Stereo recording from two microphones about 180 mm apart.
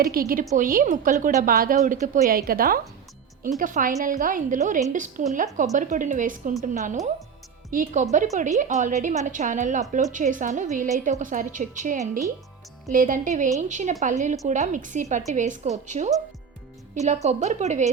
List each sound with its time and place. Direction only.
0.0 s a woman's voice: 55° right (ahead or behind)